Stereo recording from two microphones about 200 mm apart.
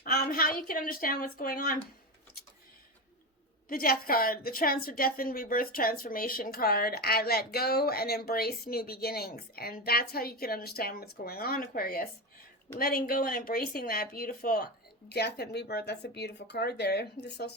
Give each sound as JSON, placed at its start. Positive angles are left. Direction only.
{"t": 0.0, "sound": "a sound", "side_deg": 45}
{"t": 0.7, "sound": "a woman's voice", "side_deg": 45}
{"t": 3.7, "sound": "a woman's voice", "side_deg": 45}